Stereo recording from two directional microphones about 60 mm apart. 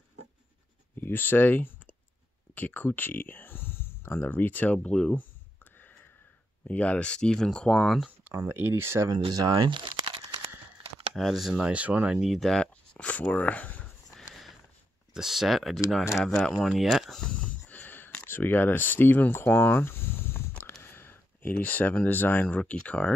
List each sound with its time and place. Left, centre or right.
1.0 s speech: left
5.1 s a sound: left
6.7 s speech: left
8.5 s speech: right
9.0 s speech: right
11.1 s speech: centre
11.5 s speech: right
12.4 s speech: centre
14.1 s a sound: centre
15.1 s speech: centre
17.2 s a sound: left
20.8 s speech: left; by 23.1 s centre